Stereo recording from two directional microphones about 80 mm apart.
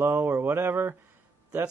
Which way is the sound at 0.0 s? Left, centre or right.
Right.